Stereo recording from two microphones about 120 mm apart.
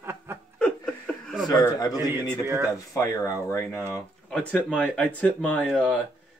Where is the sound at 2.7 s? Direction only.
25° left (ahead or behind).